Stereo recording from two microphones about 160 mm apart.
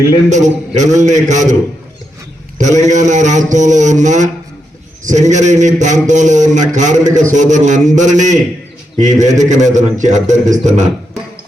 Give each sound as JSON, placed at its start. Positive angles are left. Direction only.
{"t": 0.3, "sound": "a man's voice", "side_deg": -50}
{"t": 2.8, "sound": "a man's voice", "side_deg": -50}